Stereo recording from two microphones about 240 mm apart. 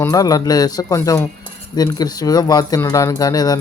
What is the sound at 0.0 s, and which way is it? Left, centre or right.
Speech, centre.